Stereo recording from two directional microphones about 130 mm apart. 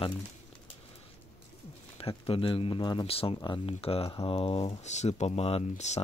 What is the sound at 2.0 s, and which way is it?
Speech, 45° left (ahead or behind).